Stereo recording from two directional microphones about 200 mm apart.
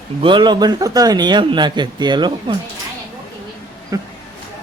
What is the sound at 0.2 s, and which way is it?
Speech, 25° right (ahead or behind).